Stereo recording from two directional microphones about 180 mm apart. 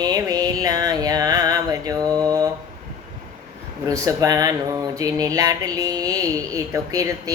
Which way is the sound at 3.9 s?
20° right (ahead or behind).